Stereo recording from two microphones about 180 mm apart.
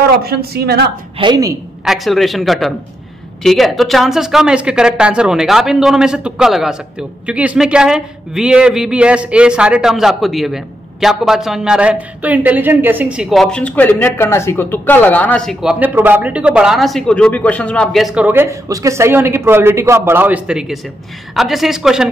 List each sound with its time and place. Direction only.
0.2 s speech: 60° right (ahead or behind)
1.1 s a woman's voice: 25° right (ahead or behind)
1.9 s speech: centre (ahead or behind)